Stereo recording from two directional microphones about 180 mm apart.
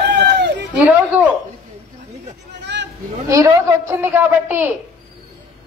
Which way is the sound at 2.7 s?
75° right (ahead or behind).